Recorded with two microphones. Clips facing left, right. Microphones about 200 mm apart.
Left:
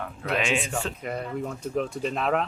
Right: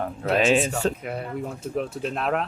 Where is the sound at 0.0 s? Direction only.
35° right (ahead or behind).